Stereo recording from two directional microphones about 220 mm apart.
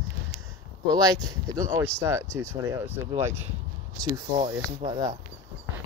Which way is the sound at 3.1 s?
30° right (ahead or behind).